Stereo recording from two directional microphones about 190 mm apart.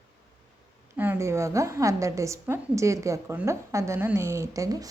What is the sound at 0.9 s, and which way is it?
A woman's voice, 10° right (ahead or behind).